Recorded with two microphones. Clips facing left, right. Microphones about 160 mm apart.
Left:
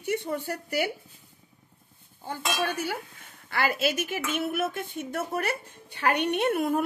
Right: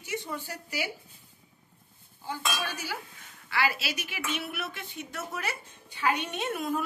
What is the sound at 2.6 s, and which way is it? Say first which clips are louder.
Speech: left 7 dB; 55° left (ahead or behind).